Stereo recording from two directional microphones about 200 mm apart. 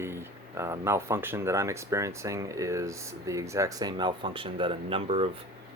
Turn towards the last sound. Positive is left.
turn(degrees=-30)  # may be behind; listen again after turning